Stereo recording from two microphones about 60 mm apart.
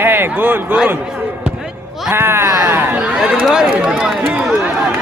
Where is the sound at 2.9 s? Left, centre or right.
Centre.